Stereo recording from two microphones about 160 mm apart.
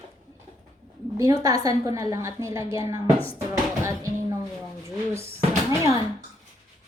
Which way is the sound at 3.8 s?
15° right (ahead or behind).